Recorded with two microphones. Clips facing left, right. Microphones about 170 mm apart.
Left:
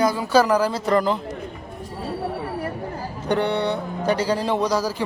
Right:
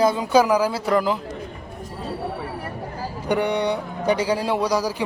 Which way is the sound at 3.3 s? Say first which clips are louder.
Even; 10° right (ahead or behind).